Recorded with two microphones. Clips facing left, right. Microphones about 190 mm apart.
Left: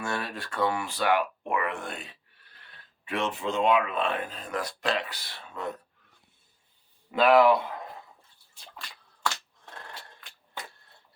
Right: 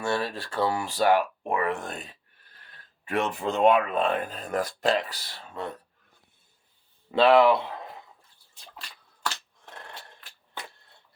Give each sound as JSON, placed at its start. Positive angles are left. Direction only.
{"t": 0.0, "sound": "speech", "side_deg": -30}
{"t": 7.1, "sound": "speech", "side_deg": -30}